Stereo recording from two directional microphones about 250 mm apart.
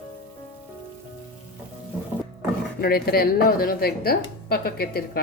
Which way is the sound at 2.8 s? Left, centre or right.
Left.